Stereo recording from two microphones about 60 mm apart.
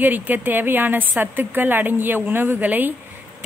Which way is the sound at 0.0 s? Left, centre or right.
Right.